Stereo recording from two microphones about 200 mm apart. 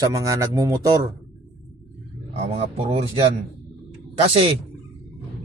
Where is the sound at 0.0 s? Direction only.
15° right (ahead or behind).